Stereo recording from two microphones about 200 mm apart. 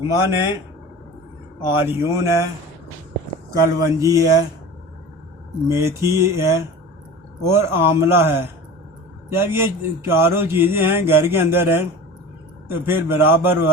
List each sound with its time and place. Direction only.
0.0 s speech: 15° right (ahead or behind)
1.6 s speech: 10° right (ahead or behind)
3.8 s speech: 15° right (ahead or behind)
5.6 s speech: 15° right (ahead or behind)